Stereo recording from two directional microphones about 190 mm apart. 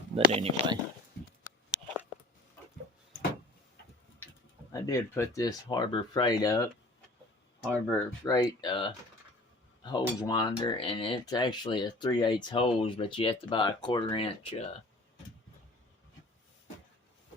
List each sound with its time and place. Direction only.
0.3 s speech: 30° right (ahead or behind)
4.7 s speech: 15° left (ahead or behind)
7.7 s speech: 15° left (ahead or behind)
10.2 s speech: 20° left (ahead or behind)